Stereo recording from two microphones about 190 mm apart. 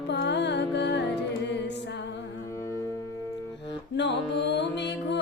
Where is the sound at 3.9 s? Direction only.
65° left (ahead or behind).